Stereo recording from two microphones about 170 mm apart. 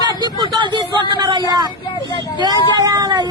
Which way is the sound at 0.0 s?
25° right (ahead or behind).